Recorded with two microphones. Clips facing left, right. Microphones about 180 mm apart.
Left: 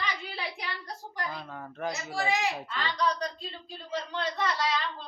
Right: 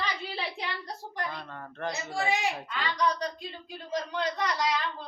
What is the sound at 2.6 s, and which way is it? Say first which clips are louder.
Speech: right 1 dB; 10° right (ahead or behind).